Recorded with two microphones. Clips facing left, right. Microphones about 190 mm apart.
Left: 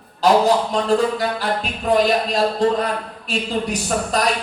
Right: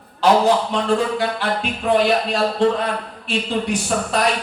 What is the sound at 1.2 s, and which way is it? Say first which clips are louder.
Speech: even; 40° left (ahead or behind).